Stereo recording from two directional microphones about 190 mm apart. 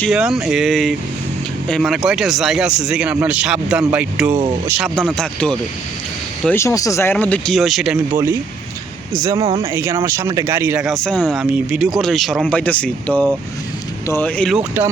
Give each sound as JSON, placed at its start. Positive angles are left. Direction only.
{"t": 0.0, "sound": "speech", "side_deg": -5}
{"t": 5.1, "sound": "speech", "side_deg": 5}
{"t": 9.1, "sound": "speech", "side_deg": -20}
{"t": 9.7, "sound": "speech", "side_deg": -10}
{"t": 10.8, "sound": "speech", "side_deg": 5}